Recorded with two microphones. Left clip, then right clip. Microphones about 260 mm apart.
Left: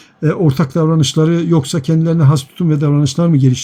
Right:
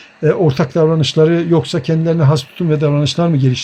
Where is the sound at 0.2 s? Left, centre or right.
Centre.